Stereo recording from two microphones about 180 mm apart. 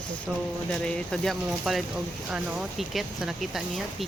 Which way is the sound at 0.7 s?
5° left (ahead or behind).